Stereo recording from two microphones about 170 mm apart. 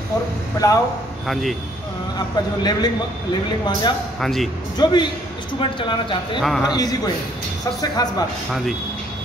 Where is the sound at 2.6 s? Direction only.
25° left (ahead or behind).